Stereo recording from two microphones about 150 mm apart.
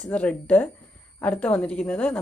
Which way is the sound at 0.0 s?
10° left (ahead or behind).